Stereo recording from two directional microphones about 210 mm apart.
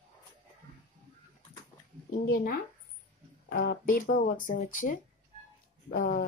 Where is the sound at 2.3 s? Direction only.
45° left (ahead or behind).